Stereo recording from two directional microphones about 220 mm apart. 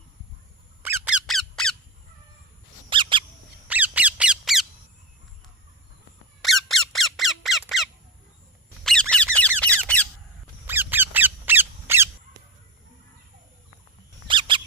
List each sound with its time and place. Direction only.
0.8 s squeak: 5° right (ahead or behind)
2.9 s bird: 20° right (ahead or behind)
3.7 s squawk: 5° right (ahead or behind)
6.4 s squeak: centre (ahead or behind)
8.8 s squeak: 5° left (ahead or behind)
10.7 s squeak: 10° right (ahead or behind)
14.3 s a sound: 20° right (ahead or behind)